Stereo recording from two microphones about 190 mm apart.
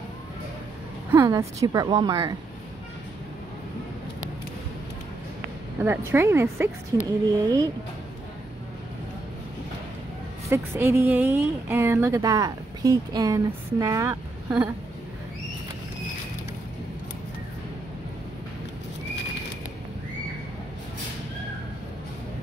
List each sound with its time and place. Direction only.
1.1 s a woman's voice: 15° right (ahead or behind)
5.8 s a woman's voice: 15° right (ahead or behind)
10.5 s speech: 15° right (ahead or behind)